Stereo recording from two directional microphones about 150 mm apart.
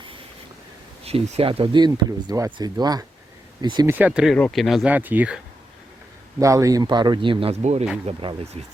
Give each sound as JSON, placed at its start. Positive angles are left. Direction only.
{"t": 1.0, "sound": "speech", "side_deg": -45}
{"t": 3.8, "sound": "speech", "side_deg": -10}
{"t": 4.4, "sound": "speech", "side_deg": 5}
{"t": 6.4, "sound": "speech", "side_deg": -20}